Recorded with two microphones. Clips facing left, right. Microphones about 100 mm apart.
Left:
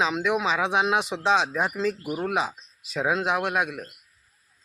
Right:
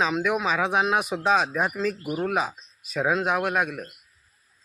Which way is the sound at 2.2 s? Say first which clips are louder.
Right 3 dB; 10° left (ahead or behind).